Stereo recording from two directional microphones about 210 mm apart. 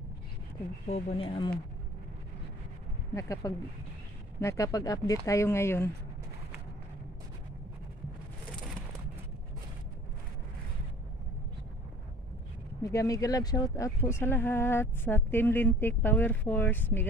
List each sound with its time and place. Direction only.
0.8 s speech: 30° left (ahead or behind)
3.2 s speech: 15° left (ahead or behind)
12.8 s speech: 15° left (ahead or behind)